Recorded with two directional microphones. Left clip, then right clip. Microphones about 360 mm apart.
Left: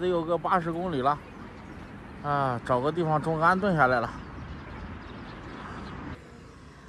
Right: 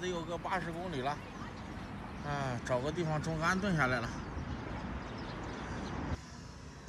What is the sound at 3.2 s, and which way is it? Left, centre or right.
Speech, centre.